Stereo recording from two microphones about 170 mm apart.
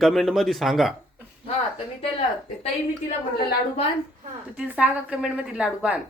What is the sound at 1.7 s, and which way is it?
Speech, 35° left (ahead or behind).